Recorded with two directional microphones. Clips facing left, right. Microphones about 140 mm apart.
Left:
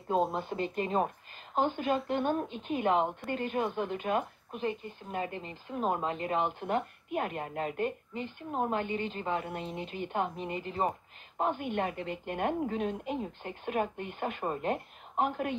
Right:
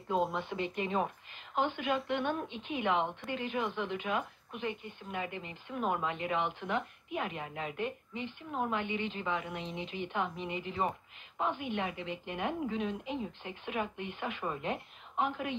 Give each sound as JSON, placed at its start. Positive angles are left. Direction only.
{"t": 0.3, "sound": "speech", "side_deg": 40}